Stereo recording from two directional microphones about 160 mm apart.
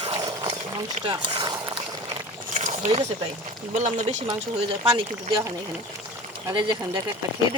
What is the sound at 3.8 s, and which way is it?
Speech, 50° right (ahead or behind).